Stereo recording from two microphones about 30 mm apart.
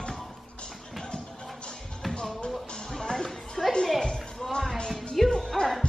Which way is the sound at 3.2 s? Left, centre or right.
Centre.